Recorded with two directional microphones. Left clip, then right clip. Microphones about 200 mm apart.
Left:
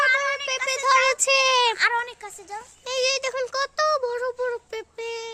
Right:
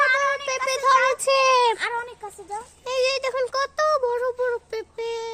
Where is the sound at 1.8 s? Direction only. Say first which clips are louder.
Left 5 dB; 20° left (ahead or behind).